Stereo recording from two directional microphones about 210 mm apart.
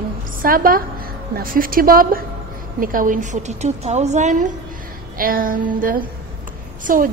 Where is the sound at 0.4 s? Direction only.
40° right (ahead or behind).